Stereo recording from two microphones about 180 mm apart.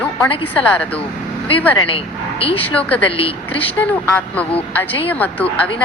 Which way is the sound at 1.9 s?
30° left (ahead or behind).